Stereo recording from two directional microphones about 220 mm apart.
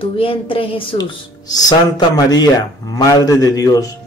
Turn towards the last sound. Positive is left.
turn(degrees=15)  # may be behind; listen again after turning